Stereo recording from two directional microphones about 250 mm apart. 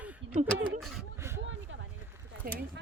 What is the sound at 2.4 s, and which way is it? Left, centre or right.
Speech, right.